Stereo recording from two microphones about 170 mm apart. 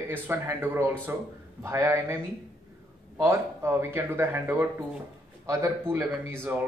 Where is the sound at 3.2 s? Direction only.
15° right (ahead or behind).